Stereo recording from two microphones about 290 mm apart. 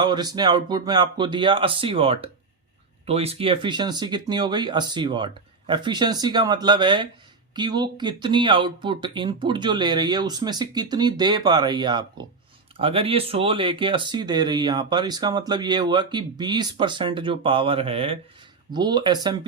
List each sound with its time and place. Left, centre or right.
0.0 s speech: centre